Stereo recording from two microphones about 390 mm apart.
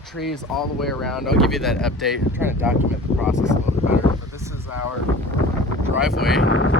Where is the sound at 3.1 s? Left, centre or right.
Centre.